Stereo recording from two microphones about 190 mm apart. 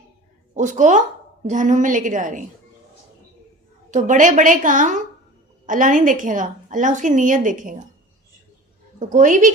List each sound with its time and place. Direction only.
0.5 s a woman's voice: 40° right (ahead or behind)
3.9 s a woman's voice: 40° right (ahead or behind)
9.0 s a woman's voice: 40° right (ahead or behind)